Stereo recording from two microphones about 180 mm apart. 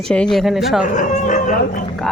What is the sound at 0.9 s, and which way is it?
Bow-wow, 45° left (ahead or behind).